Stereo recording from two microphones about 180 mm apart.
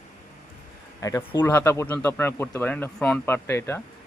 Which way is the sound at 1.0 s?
20° left (ahead or behind).